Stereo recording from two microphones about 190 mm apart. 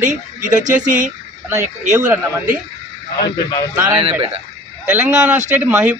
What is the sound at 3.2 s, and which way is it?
Speech, 20° left (ahead or behind).